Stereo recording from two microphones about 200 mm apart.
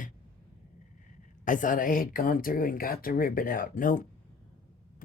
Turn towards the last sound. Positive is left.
turn(degrees=40)  # may be behind; listen again after turning